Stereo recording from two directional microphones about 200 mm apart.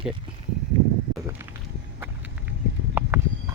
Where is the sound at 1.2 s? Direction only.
15° right (ahead or behind).